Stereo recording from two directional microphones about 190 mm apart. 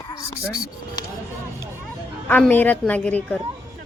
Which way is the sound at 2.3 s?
10° left (ahead or behind).